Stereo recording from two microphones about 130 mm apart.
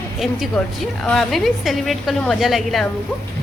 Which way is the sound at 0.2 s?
Centre (ahead or behind).